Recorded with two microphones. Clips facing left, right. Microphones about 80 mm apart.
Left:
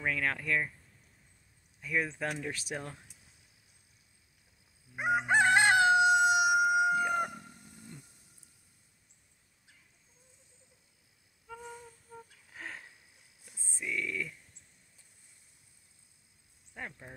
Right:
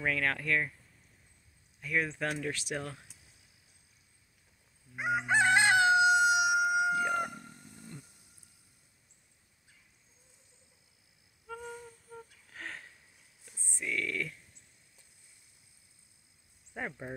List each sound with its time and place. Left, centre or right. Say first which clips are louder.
0.0 s speech: right 1 dB; centre
1.8 s speech: right 1 dB; centre
5.1 s crowing: left 1 dB; left
6.6 s chicken: left 2 dB; centre
12.4 s a sound: even; centre
13.5 s a sound: right 1 dB; centre
13.8 s speech: right 1 dB; centre
16.8 s speech: right 5 dB; centre